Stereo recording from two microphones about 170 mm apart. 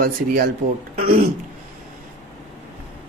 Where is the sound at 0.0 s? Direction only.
60° right (ahead or behind).